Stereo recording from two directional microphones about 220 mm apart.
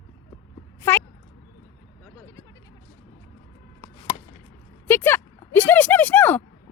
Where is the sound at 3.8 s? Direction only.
15° left (ahead or behind).